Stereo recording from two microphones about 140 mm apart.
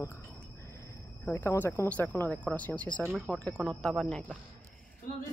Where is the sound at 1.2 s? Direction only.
15° left (ahead or behind).